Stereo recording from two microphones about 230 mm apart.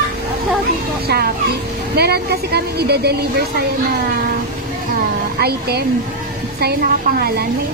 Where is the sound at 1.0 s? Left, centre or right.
Right.